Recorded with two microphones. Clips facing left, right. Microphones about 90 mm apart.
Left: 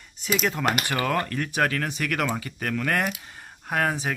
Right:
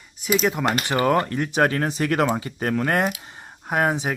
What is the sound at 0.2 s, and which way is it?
Speech, 5° right (ahead or behind).